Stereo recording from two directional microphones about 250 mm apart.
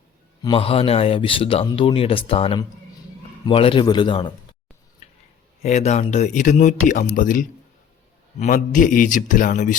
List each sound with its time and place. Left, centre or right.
0.4 s speech: left
5.6 s speech: left